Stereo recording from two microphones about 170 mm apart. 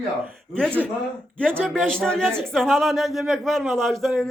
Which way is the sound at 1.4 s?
5° left (ahead or behind).